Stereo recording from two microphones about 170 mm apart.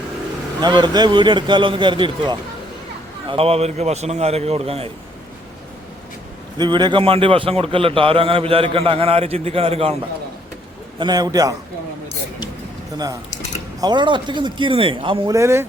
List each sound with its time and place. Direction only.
0.6 s a man's voice: 25° right (ahead or behind)
6.6 s a man's voice: 25° right (ahead or behind)
11.0 s a man's voice: 20° right (ahead or behind)
13.8 s a man's voice: 25° right (ahead or behind)
15.4 s speech: 15° right (ahead or behind)